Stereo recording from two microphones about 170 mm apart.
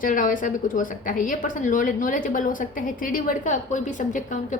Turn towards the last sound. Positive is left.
turn(degrees=50)  # may be behind; listen again after turning